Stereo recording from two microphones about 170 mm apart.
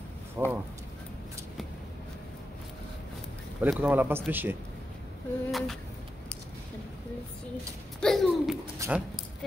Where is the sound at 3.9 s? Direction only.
10° right (ahead or behind).